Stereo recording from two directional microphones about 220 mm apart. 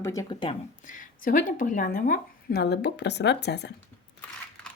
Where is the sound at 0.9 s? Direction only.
35° left (ahead or behind).